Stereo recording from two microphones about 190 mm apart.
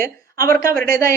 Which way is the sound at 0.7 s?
50° right (ahead or behind).